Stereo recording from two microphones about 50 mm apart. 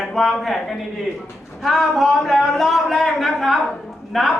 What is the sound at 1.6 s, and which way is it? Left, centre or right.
A man's voice, centre.